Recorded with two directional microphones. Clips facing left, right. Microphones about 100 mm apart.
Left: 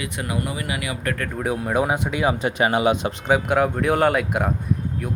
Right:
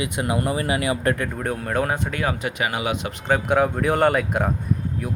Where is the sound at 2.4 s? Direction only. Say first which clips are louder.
Left 6 dB; 30° left (ahead or behind).